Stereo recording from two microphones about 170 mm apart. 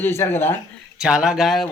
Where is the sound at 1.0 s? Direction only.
5° right (ahead or behind).